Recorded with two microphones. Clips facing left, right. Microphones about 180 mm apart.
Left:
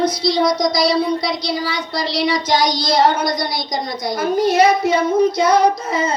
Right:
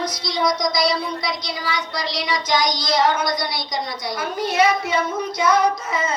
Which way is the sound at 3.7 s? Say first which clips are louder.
Left 3 dB; 50° left (ahead or behind).